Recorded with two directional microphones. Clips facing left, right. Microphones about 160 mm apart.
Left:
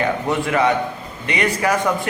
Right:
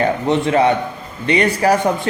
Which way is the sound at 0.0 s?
30° right (ahead or behind).